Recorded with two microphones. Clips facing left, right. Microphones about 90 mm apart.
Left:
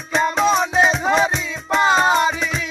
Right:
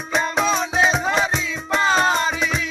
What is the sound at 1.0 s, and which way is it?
Music, 15° left (ahead or behind).